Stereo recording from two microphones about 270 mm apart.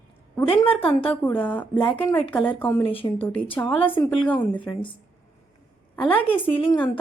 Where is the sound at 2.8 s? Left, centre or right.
Centre.